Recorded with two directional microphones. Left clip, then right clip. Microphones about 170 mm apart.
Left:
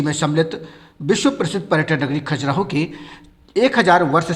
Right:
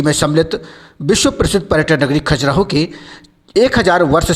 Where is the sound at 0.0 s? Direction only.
30° right (ahead or behind).